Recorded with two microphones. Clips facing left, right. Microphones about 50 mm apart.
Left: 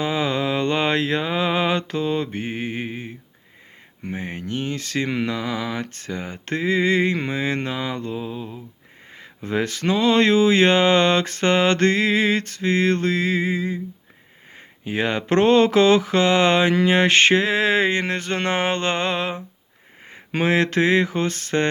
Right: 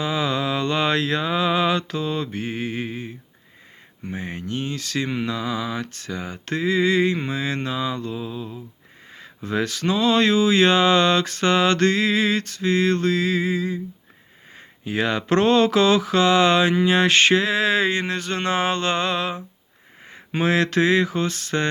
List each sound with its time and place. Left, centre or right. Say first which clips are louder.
0.0 s mantra: left 1 dB; left
4.1 s speech: left 1 dB; left
20.4 s speech: even; left